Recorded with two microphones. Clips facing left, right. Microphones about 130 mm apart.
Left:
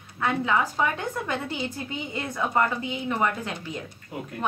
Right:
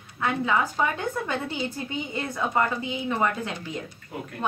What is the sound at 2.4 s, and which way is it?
A woman's voice, 10° left (ahead or behind).